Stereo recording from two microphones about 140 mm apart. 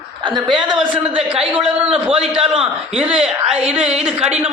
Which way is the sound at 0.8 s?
35° right (ahead or behind).